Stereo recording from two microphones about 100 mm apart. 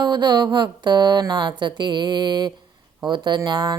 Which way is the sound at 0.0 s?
45° right (ahead or behind).